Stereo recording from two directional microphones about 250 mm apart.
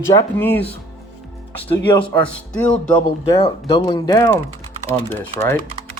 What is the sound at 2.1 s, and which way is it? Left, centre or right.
Speech, centre.